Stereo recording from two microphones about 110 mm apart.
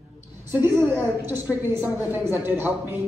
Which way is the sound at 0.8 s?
20° right (ahead or behind).